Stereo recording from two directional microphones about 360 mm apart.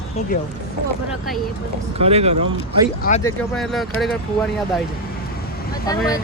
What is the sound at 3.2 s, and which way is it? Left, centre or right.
Speech, centre.